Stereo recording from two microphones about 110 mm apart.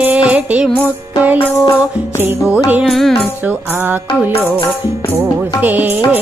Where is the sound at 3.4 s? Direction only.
15° right (ahead or behind).